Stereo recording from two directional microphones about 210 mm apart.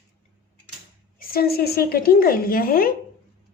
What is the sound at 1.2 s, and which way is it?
A woman's voice, 45° left (ahead or behind).